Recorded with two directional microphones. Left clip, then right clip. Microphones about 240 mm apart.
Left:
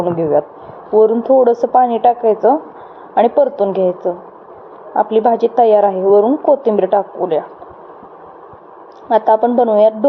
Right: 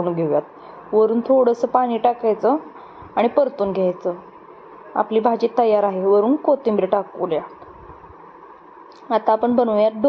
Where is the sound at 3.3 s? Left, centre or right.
Centre.